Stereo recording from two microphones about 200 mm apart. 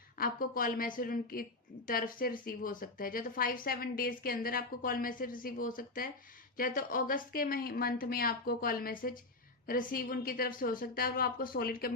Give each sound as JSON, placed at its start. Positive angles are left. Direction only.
{"t": 0.2, "sound": "a woman's voice", "side_deg": 45}